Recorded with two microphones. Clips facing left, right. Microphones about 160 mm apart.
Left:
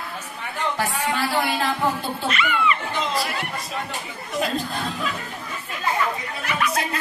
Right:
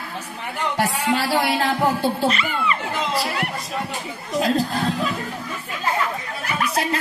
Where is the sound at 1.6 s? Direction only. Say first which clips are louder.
Right 4 dB; 35° right (ahead or behind).